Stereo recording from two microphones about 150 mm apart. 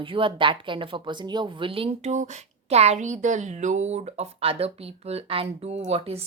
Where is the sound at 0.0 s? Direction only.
35° right (ahead or behind).